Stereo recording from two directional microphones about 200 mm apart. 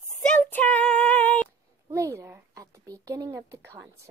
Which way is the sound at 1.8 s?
15° right (ahead or behind).